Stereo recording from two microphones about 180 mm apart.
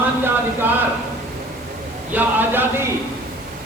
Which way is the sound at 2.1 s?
10° right (ahead or behind).